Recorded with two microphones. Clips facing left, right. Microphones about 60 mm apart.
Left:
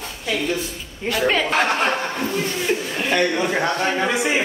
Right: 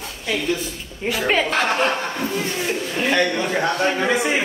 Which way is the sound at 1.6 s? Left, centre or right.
Centre.